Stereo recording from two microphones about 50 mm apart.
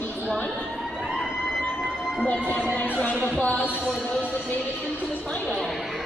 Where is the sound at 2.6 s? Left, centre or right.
Left.